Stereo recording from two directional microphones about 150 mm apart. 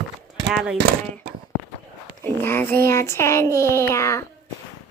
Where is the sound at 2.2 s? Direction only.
15° left (ahead or behind).